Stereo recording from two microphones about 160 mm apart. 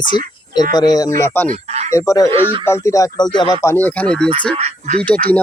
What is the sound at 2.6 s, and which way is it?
Speech, 20° left (ahead or behind).